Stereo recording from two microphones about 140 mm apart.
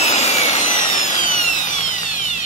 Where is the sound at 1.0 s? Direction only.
70° left (ahead or behind).